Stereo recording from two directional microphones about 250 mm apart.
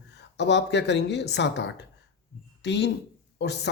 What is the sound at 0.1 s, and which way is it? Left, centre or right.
Speech, left.